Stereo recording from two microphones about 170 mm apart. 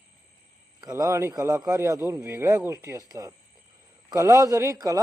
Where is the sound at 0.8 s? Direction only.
20° right (ahead or behind).